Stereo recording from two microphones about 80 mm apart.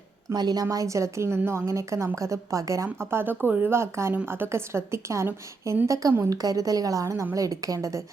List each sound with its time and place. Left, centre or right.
0.3 s a woman's voice: right